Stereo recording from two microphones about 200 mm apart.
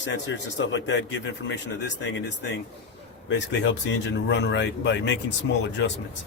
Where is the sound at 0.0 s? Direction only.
65° left (ahead or behind).